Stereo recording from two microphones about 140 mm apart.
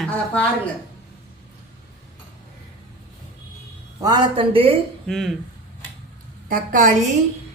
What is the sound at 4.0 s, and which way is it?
Speech, 30° right (ahead or behind).